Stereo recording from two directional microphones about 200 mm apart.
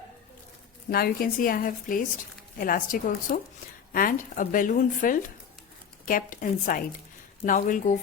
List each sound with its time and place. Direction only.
0.9 s a woman's voice: 50° left (ahead or behind)